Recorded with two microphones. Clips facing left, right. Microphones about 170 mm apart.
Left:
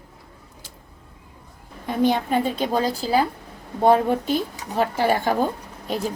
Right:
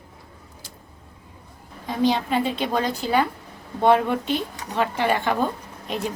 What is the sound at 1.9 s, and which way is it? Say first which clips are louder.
A woman's voice: left 1 dB; 55° left (ahead or behind).